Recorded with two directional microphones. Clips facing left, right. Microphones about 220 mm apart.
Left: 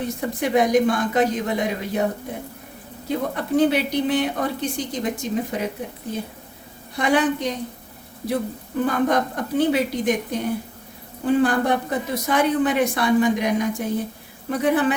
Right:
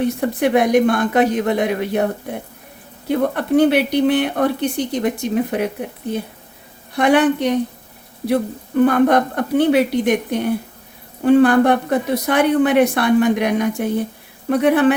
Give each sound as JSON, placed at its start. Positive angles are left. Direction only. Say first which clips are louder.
{"t": 0.0, "sound": "a woman's voice", "louder": "right 7 dB", "side_deg": -60}
{"t": 3.1, "sound": "a woman's voice", "louder": "right 6 dB", "side_deg": -65}
{"t": 6.9, "sound": "a woman's voice", "louder": "right 6 dB", "side_deg": -65}
{"t": 8.8, "sound": "a woman's voice", "louder": "right 7 dB", "side_deg": -65}